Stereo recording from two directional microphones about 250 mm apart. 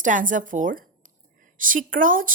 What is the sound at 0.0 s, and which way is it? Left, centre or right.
A woman's voice, right.